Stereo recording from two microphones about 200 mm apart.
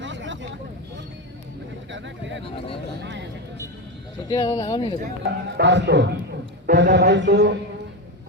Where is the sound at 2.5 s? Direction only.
30° left (ahead or behind).